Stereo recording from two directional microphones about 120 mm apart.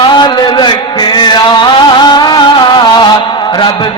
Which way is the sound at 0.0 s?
40° left (ahead or behind).